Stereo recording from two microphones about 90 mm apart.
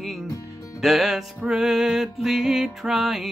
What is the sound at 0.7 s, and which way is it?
Music, centre (ahead or behind).